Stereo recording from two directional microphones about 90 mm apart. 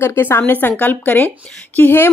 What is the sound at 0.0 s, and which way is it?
A woman's voice, 25° left (ahead or behind).